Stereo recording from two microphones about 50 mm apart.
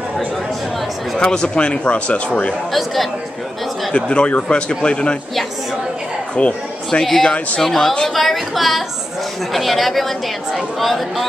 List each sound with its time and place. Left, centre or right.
1.1 s speech: centre
2.7 s a woman's voice: centre
3.9 s speech: left
6.3 s speech: left
7.0 s a woman's voice: centre
7.2 s speech: left
7.6 s a woman's voice: centre